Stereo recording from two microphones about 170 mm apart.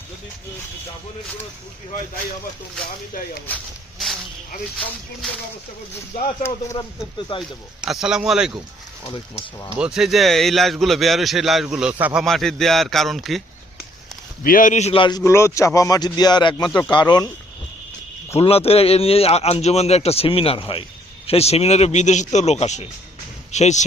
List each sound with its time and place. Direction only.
3.4 s a sound: 5° left (ahead or behind)
6.4 s speech: 20° left (ahead or behind)
7.2 s speech: 30° left (ahead or behind)
7.8 s a man's voice: 5° right (ahead or behind)
9.7 s a man's voice: 5° right (ahead or behind)
12.2 s a man's voice: centre (ahead or behind)
14.4 s a man's voice: 55° left (ahead or behind); by 15.2 s 30° left (ahead or behind)
15.2 s speech: 15° left (ahead or behind)
16.6 s speech: 5° left (ahead or behind)
16.9 s speech: 25° left (ahead or behind)
18.3 s a man's voice: 35° left (ahead or behind)